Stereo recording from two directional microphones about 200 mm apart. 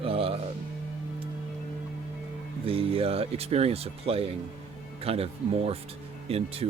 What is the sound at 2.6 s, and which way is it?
Speech, 30° right (ahead or behind).